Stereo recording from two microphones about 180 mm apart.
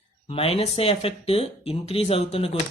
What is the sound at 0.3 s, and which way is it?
Speech, 30° left (ahead or behind).